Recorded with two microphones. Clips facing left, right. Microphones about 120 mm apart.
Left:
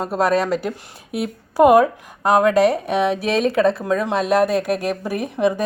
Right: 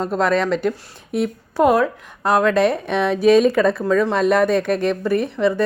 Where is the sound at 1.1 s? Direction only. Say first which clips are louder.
Right 1 dB; 10° left (ahead or behind).